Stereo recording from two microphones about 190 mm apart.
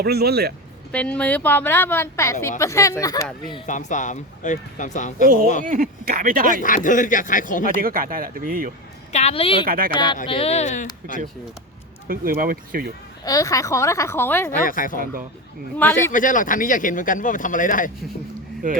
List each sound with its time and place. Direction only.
0.0 s speech: 55° right (ahead or behind)
0.9 s speech: 5° left (ahead or behind)
3.7 s speech: 40° left (ahead or behind)
5.2 s speech: 45° right (ahead or behind)
6.6 s speech: 45° left (ahead or behind)
7.8 s speech: 50° right (ahead or behind)
9.1 s a woman's voice: 30° left (ahead or behind)
9.6 s speech: 50° right (ahead or behind)
9.9 s a woman's voice: 25° left (ahead or behind)
12.0 s speech: 50° right (ahead or behind)
13.2 s speech: 20° left (ahead or behind)
14.5 s speech: 45° left (ahead or behind)
15.8 s speech: 10° left (ahead or behind)
16.1 s speech: 45° left (ahead or behind)